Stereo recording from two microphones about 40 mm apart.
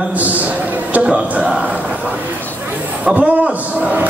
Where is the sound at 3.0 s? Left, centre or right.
Right.